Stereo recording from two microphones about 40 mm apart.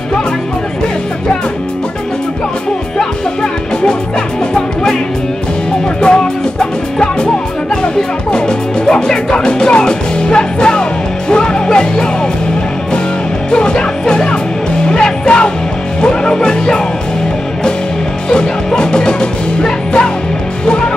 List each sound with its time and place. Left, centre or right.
5.9 s music: left
13.5 s music: left
18.3 s music: left